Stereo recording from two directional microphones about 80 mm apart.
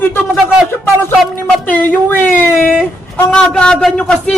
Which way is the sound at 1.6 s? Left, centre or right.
Left.